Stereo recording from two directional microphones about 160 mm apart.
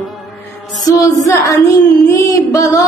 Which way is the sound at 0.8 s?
20° left (ahead or behind).